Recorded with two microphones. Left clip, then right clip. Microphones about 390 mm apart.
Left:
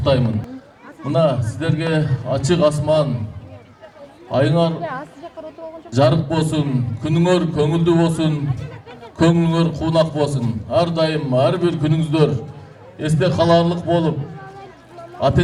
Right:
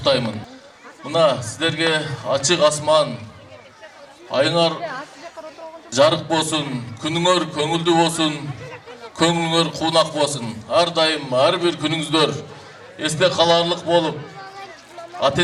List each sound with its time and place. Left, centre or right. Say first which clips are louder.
0.0 s a man's voice: even; right
4.3 s a man's voice: even; right
5.9 s a man's voice: right 1 dB; right